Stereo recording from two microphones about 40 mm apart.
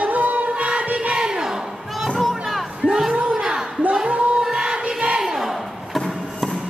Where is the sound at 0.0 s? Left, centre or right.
Right.